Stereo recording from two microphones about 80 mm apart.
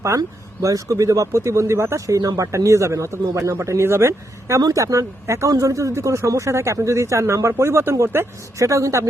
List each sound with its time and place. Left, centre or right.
0.2 s speech: right